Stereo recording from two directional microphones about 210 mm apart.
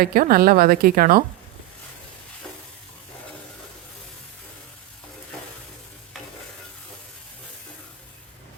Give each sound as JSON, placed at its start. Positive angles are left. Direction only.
{"t": 0.0, "sound": "a woman's voice", "side_deg": -45}